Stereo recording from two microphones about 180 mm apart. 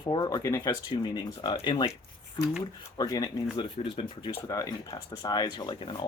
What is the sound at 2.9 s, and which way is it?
Speech, 20° left (ahead or behind).